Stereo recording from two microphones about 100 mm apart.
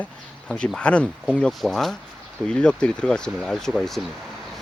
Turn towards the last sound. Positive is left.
turn(degrees=0)  # may be behind; listen again after turning